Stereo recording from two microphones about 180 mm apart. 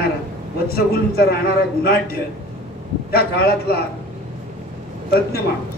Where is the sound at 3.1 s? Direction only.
60° left (ahead or behind).